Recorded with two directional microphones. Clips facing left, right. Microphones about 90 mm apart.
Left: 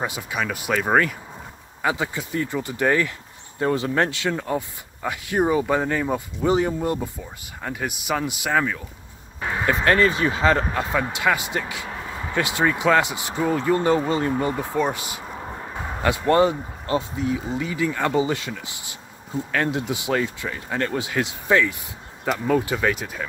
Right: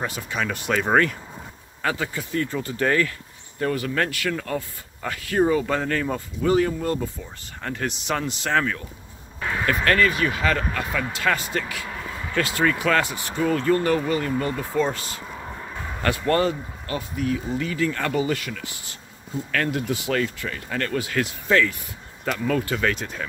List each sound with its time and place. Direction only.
0.0 s speech: 15° left (ahead or behind)
1.8 s speech: 15° left (ahead or behind)
7.6 s speech: 10° left (ahead or behind)
9.4 s speech: 20° left (ahead or behind)